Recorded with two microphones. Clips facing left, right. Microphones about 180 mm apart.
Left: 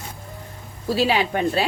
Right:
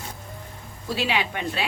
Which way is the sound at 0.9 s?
40° left (ahead or behind).